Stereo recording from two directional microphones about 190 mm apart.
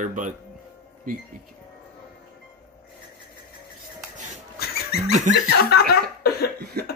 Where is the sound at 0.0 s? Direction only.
40° right (ahead or behind).